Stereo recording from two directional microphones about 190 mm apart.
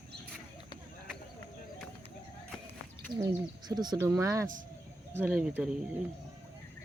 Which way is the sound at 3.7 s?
20° right (ahead or behind).